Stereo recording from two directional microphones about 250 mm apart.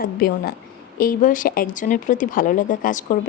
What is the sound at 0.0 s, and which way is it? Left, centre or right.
Speech, left.